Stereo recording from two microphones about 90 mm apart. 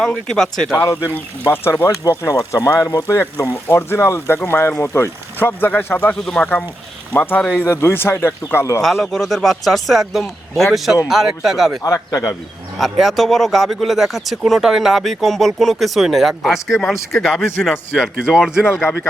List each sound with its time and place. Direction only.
0.0 s speech: 5° left (ahead or behind)
0.8 s speech: 40° left (ahead or behind)
1.1 s speech: 25° left (ahead or behind)
2.0 s speech: 40° left (ahead or behind)
8.8 s speech: 5° left (ahead or behind)
11.8 s speech: 40° left (ahead or behind)
12.8 s speech: centre (ahead or behind)